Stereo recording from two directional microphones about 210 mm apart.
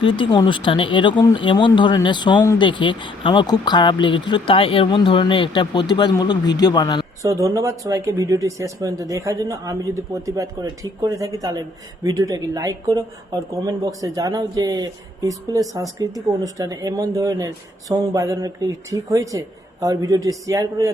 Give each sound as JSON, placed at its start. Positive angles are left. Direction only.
{"t": 0.0, "sound": "speech", "side_deg": 25}
{"t": 7.2, "sound": "speech", "side_deg": -15}